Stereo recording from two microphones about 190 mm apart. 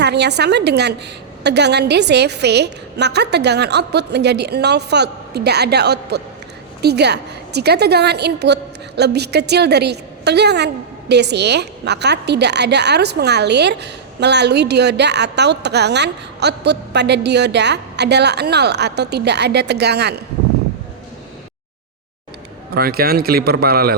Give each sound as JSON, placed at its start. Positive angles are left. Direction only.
{"t": 0.0, "sound": "a woman's voice", "side_deg": -60}
{"t": 22.7, "sound": "a man's voice", "side_deg": -55}